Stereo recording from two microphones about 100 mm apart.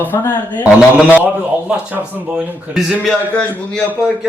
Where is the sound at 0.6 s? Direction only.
15° right (ahead or behind).